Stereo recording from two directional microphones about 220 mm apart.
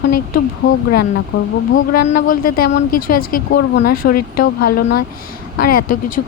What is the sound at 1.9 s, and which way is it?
Speech, 50° left (ahead or behind).